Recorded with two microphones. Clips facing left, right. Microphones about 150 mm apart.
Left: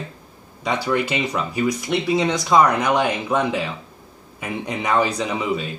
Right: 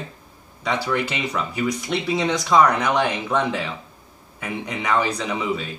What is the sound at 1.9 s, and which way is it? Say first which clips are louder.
A man's voice: left 2 dB; 5° left (ahead or behind).